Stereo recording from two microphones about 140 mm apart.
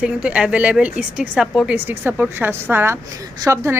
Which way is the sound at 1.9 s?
15° right (ahead or behind).